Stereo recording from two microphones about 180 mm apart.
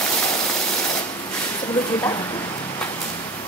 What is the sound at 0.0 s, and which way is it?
Vehicle, 15° left (ahead or behind).